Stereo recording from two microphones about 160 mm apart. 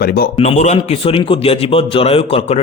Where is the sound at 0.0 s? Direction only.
70° left (ahead or behind).